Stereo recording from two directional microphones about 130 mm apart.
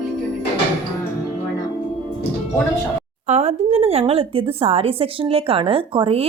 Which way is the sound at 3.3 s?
55° right (ahead or behind).